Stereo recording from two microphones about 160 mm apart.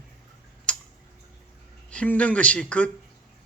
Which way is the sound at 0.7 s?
5° left (ahead or behind).